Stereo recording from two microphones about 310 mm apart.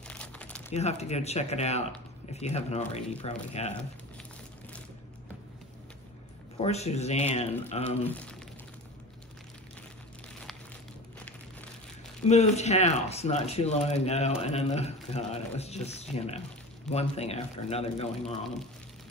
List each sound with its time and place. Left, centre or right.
0.1 s crumpling: centre
0.7 s speech: left
6.6 s speech: left
8.1 s speech: centre
12.3 s speech: left